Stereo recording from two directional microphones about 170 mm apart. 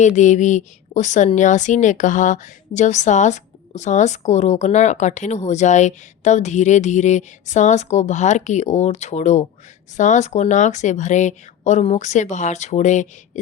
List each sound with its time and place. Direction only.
0.0 s a woman's voice: 45° left (ahead or behind)